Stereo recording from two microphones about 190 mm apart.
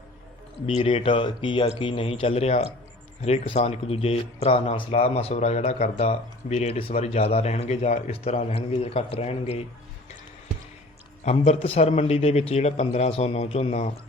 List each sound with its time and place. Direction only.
0.6 s speech: 30° left (ahead or behind)
11.3 s speech: 35° left (ahead or behind)